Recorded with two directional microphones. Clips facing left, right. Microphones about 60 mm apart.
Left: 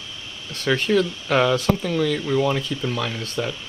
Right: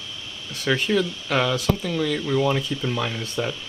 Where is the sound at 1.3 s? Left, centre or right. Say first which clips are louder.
Left 4 dB; centre.